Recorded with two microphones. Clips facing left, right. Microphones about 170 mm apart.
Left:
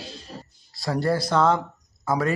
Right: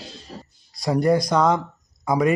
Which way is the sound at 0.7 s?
20° right (ahead or behind).